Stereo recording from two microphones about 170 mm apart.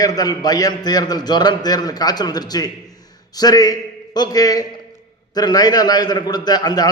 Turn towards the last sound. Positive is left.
turn(degrees=25)  # may be behind; listen again after turning